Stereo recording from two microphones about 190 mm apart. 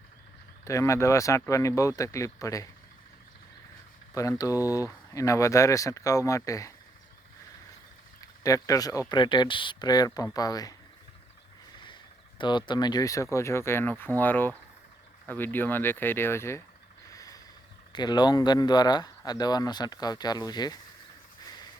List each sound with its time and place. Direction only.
0.6 s speech: 15° left (ahead or behind)
4.1 s speech: 15° left (ahead or behind)
8.4 s speech: 20° left (ahead or behind)
12.4 s speech: 25° left (ahead or behind)
17.1 s a sound: 20° left (ahead or behind)
17.9 s speech: 20° left (ahead or behind)
21.4 s a sound: 20° left (ahead or behind)